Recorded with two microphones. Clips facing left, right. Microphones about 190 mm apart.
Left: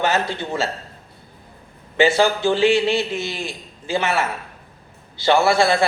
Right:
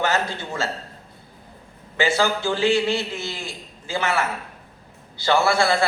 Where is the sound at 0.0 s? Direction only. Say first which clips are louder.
Left 2 dB; 20° left (ahead or behind).